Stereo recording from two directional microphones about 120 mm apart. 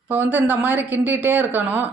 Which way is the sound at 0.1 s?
15° right (ahead or behind).